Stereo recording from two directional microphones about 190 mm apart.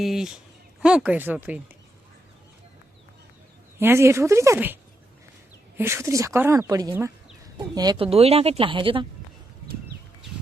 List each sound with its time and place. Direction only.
0.0 s speech: centre (ahead or behind)
3.8 s speech: 15° right (ahead or behind)
6.9 s chicken: 5° right (ahead or behind)
7.8 s speech: 25° right (ahead or behind)